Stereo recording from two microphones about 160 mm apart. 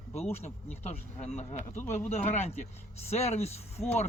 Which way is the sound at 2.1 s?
45° left (ahead or behind).